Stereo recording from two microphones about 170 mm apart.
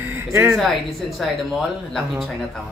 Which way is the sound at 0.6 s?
Centre (ahead or behind).